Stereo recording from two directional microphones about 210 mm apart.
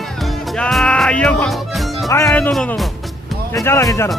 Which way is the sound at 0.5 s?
5° left (ahead or behind).